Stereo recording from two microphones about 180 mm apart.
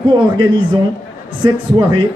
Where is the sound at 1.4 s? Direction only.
25° right (ahead or behind).